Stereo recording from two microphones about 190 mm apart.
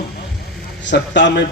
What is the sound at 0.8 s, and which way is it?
Speech, 70° left (ahead or behind).